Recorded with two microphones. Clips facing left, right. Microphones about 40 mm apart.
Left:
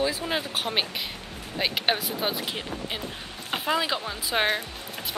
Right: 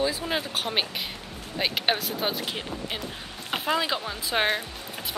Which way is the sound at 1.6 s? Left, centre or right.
Centre.